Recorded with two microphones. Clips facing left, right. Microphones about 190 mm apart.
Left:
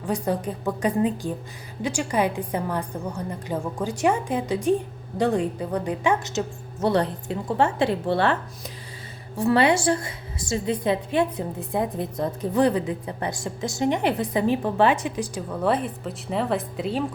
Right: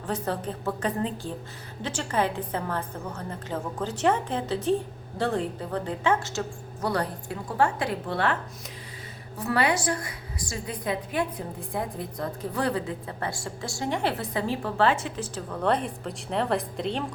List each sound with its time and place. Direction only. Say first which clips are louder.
0.1 s a woman's voice: left 4 dB; 15° left (ahead or behind); by 8.4 s 30° left (ahead or behind)
9.4 s a woman's voice: left 6 dB; 25° left (ahead or behind); by 17.0 s 5° left (ahead or behind)